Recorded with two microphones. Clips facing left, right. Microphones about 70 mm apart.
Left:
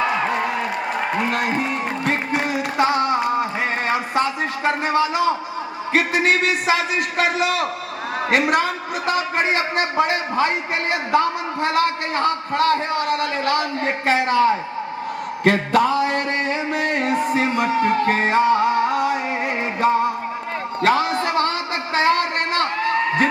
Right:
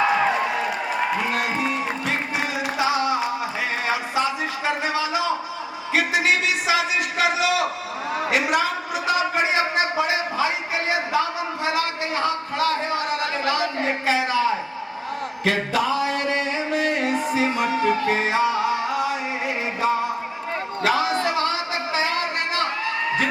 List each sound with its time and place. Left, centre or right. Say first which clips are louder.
1.3 s music: left 2 dB; left
5.9 s a man's voice: left 2 dB; left
15.4 s music: left 5 dB; left
20.8 s a sound: left 3 dB; left